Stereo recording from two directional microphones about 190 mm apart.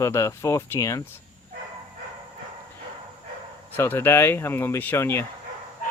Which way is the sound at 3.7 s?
10° left (ahead or behind).